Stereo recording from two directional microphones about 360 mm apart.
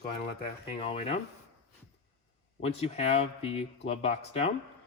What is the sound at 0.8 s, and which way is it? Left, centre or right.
Speech, centre.